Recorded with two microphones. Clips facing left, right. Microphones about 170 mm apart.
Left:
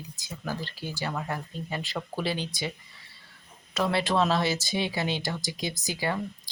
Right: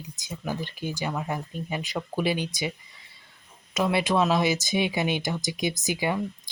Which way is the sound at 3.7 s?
15° right (ahead or behind).